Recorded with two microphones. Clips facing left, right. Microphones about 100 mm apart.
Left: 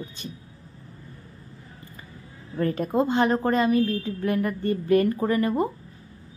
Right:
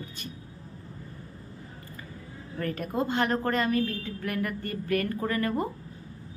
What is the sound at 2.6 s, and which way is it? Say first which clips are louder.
A woman's voice: left 6 dB; 25° left (ahead or behind).